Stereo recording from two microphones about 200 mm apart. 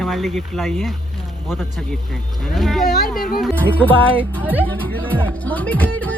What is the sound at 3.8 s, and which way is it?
Music, 10° left (ahead or behind).